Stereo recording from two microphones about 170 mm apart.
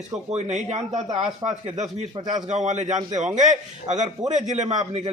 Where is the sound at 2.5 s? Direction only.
45° right (ahead or behind).